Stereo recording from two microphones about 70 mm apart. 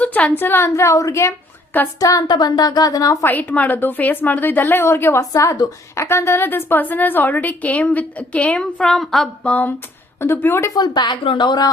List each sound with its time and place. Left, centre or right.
0.0 s a woman's voice: left
2.2 s speech: left
3.2 s a woman's voice: left
5.3 s a woman's voice: left; by 9.3 s centre
9.4 s a woman's voice: left
10.2 s a woman's voice: left
10.8 s speech: left